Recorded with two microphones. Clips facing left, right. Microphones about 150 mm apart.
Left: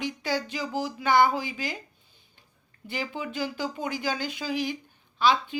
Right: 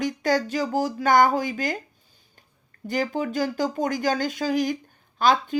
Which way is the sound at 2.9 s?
45° right (ahead or behind).